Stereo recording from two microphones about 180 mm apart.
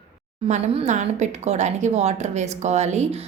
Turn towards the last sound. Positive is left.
turn(degrees=-35)  # may be behind; listen again after turning